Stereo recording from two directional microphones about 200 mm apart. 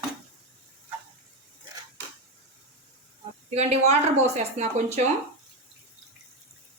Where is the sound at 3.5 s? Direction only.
30° right (ahead or behind).